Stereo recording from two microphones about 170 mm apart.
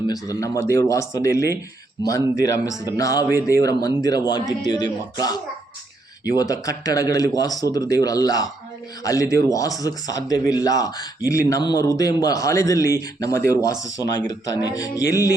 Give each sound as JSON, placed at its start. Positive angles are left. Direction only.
{"t": 0.1, "sound": "a man's voice", "side_deg": 20}
{"t": 6.3, "sound": "a man's voice", "side_deg": 20}